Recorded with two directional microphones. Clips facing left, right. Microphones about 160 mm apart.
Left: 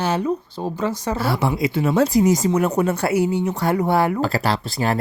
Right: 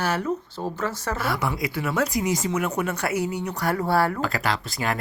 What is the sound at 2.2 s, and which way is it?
Speech, 40° left (ahead or behind).